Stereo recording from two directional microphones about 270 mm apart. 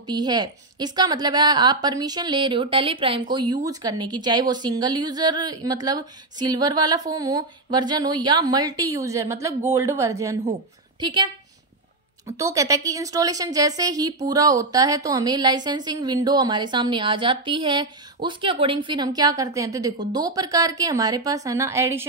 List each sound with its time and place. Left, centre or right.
0.0 s a woman's voice: centre
12.4 s a woman's voice: centre